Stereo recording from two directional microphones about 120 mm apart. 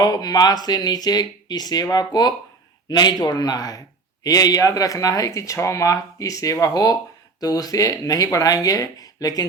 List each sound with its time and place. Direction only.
0.0 s speech: 35° left (ahead or behind)